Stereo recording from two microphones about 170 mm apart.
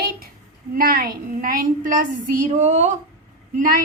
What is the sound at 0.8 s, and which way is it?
A woman's voice, 60° right (ahead or behind).